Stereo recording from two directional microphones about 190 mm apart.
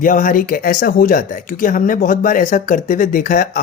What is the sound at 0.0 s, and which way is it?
Speech, 45° left (ahead or behind).